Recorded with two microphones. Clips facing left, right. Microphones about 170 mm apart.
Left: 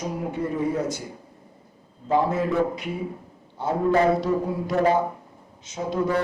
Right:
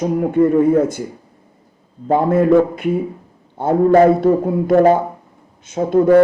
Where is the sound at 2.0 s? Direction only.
55° right (ahead or behind).